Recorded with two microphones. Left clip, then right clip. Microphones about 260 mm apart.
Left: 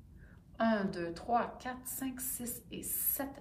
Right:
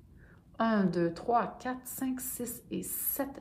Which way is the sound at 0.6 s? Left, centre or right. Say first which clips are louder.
Right 4 dB; right.